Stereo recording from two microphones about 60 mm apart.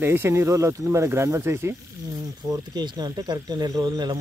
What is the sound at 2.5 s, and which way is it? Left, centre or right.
Speech, right.